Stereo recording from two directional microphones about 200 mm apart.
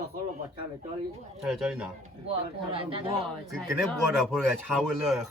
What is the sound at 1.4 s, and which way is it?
Speech, centre (ahead or behind).